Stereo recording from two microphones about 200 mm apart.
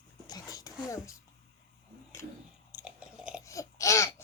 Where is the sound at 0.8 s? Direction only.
15° left (ahead or behind).